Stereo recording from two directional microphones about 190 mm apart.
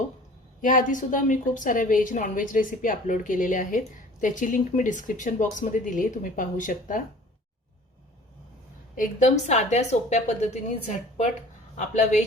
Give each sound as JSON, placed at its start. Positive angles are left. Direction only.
{"t": 0.6, "sound": "a woman's voice", "side_deg": 45}
{"t": 9.0, "sound": "a woman's voice", "side_deg": 40}